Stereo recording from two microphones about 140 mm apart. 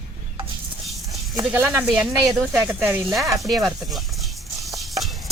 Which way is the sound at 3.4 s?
Centre (ahead or behind).